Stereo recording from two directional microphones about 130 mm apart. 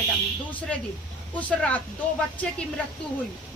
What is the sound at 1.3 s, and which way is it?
A woman's voice, 10° left (ahead or behind).